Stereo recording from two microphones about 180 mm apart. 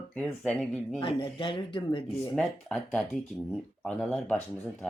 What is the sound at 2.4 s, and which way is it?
Speech, 5° left (ahead or behind).